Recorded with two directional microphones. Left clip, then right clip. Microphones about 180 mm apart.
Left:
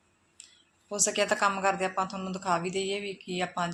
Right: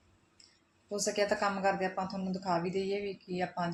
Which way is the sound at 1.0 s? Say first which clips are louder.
Left 4 dB; 5° left (ahead or behind).